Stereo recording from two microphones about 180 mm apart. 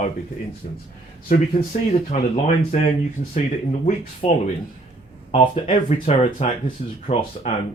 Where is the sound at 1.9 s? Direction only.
35° left (ahead or behind).